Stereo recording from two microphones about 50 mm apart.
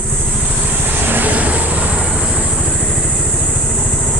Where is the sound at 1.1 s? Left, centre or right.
Right.